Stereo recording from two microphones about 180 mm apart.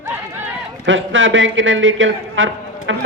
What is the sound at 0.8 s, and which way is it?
A man's voice, 90° right.